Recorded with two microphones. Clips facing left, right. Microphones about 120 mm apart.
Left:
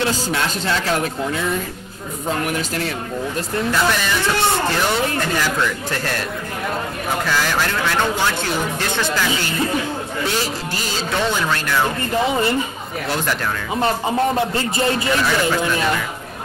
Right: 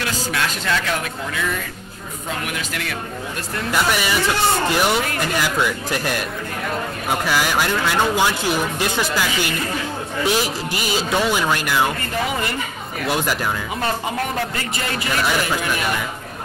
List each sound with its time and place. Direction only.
0.0 s speech: 30° left (ahead or behind)
3.7 s speech: 10° right (ahead or behind)
7.2 s speech: 10° right (ahead or behind)
13.1 s speech: 10° right (ahead or behind)
13.7 s speech: 25° left (ahead or behind)